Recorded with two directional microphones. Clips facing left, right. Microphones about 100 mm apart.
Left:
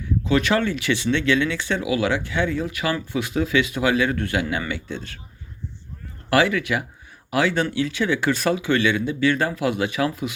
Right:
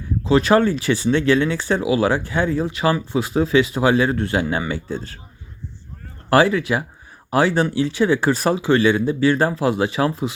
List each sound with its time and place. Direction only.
0.0 s speech: 30° right (ahead or behind)
6.3 s speech: 30° right (ahead or behind)